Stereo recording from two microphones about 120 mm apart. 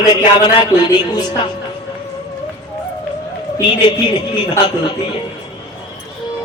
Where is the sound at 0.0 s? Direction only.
30° left (ahead or behind).